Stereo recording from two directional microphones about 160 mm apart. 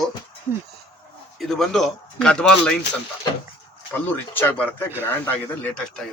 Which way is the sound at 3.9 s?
10° left (ahead or behind).